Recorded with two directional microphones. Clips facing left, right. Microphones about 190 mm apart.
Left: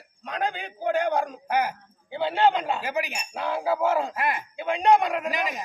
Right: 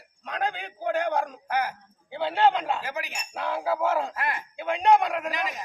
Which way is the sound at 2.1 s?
Centre (ahead or behind).